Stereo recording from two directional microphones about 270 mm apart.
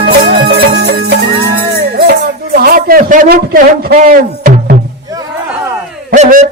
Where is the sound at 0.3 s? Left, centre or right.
Right.